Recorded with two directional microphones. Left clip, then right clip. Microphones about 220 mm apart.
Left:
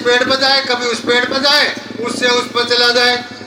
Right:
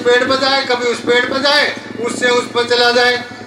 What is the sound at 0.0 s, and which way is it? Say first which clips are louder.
A man's voice: even; 20° left (ahead or behind).